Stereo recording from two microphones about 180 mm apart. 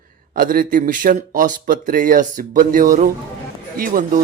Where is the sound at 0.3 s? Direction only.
50° right (ahead or behind).